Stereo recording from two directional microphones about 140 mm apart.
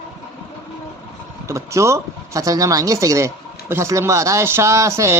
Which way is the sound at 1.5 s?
20° right (ahead or behind).